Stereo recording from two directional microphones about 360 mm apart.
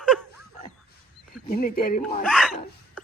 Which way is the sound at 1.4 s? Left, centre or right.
Left.